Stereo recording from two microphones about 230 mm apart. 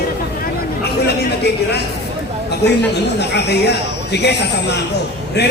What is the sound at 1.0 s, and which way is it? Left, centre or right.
A man's voice, left.